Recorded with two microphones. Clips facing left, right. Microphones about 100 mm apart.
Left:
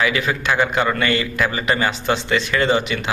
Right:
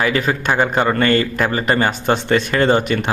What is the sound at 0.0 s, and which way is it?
A man's voice, 40° right (ahead or behind).